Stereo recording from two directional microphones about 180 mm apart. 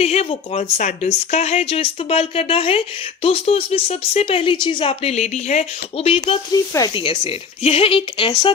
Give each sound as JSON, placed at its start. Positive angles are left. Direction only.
{"t": 0.0, "sound": "speech", "side_deg": 35}
{"t": 7.0, "sound": "speech", "side_deg": 30}